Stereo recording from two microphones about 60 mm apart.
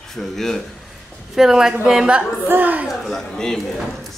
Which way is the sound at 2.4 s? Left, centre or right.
Right.